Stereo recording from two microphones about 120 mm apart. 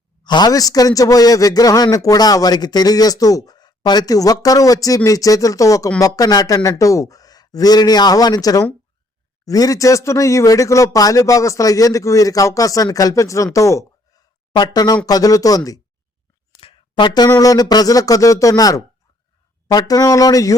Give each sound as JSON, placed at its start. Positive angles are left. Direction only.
{"t": 0.3, "sound": "a man's voice", "side_deg": 35}
{"t": 16.6, "sound": "a sound", "side_deg": 45}
{"t": 17.2, "sound": "a man's voice", "side_deg": 30}